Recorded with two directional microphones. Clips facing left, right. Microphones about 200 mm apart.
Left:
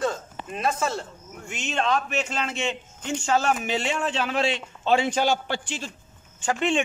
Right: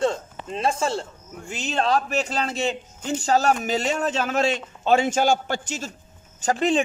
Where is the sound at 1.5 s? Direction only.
35° right (ahead or behind).